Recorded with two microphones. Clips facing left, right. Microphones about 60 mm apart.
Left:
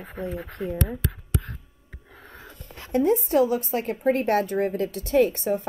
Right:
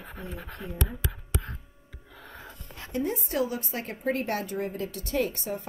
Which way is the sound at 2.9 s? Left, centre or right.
Left.